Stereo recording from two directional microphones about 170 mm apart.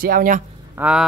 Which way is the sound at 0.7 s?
5° right (ahead or behind).